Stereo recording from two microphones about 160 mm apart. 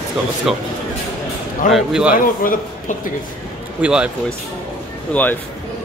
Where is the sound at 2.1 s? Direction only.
60° left (ahead or behind).